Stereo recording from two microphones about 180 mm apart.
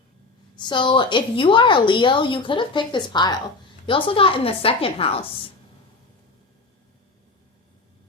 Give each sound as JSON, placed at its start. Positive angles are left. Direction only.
{"t": 0.5, "sound": "a woman's voice", "side_deg": 25}